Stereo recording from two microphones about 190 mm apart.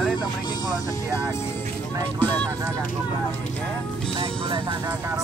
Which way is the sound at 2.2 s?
10° left (ahead or behind).